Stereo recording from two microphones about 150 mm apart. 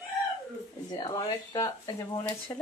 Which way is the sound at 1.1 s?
25° left (ahead or behind).